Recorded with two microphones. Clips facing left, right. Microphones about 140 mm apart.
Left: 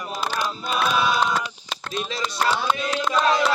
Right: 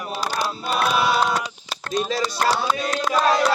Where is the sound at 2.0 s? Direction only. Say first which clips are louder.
Right 1 dB; 35° right (ahead or behind).